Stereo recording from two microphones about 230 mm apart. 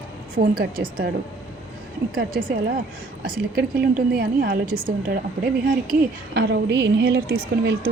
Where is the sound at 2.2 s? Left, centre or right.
Right.